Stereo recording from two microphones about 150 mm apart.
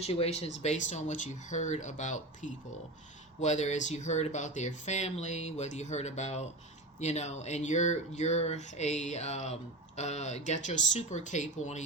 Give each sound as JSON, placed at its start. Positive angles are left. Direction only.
{"t": 0.0, "sound": "speech", "side_deg": 45}